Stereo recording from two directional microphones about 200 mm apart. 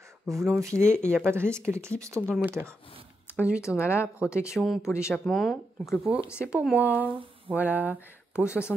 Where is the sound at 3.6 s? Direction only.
15° left (ahead or behind).